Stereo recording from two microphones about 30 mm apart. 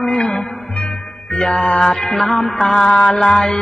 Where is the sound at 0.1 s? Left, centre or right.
Left.